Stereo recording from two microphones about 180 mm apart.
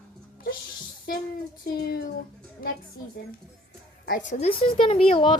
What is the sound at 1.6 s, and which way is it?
A child's voice, 60° left (ahead or behind).